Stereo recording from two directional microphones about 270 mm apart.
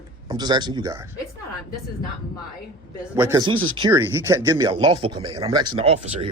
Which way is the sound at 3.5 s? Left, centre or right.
Right.